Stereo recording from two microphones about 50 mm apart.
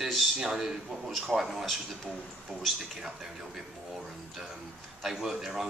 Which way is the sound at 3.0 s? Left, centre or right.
Centre.